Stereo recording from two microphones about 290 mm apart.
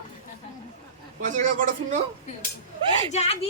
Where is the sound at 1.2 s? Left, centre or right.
Right.